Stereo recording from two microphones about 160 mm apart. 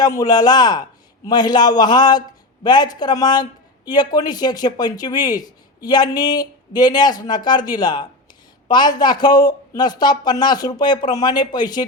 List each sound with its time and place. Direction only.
0.0 s speech: 25° left (ahead or behind)